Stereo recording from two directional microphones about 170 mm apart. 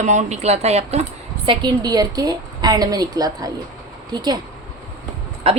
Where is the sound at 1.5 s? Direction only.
25° right (ahead or behind).